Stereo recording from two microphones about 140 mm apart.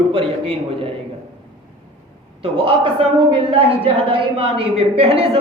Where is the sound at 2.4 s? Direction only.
40° right (ahead or behind).